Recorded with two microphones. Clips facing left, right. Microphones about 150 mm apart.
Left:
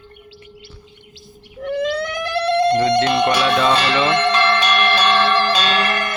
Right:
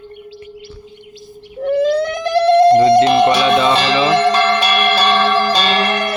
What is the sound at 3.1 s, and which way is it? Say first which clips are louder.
Music: right 5 dB; 25° right (ahead or behind).